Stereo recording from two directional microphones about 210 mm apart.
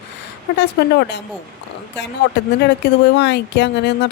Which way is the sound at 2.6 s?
55° left (ahead or behind).